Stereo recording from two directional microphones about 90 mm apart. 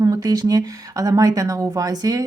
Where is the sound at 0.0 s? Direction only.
45° right (ahead or behind).